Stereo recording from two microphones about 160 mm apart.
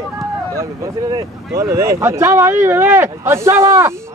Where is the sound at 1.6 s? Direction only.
15° right (ahead or behind).